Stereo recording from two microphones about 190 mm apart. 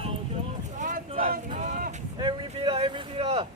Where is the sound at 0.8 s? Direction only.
45° right (ahead or behind).